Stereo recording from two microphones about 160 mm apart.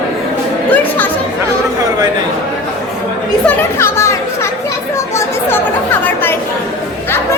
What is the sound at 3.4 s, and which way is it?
Chatter, 15° left (ahead or behind).